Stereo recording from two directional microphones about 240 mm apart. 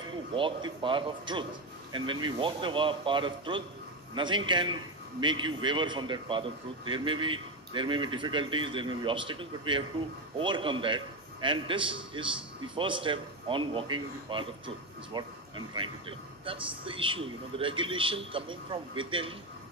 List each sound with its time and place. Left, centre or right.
0.3 s a man's voice: right